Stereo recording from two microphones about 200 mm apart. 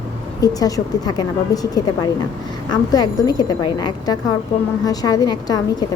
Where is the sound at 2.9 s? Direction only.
20° left (ahead or behind).